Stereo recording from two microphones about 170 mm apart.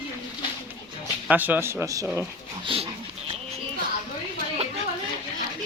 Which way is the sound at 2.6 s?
30° right (ahead or behind).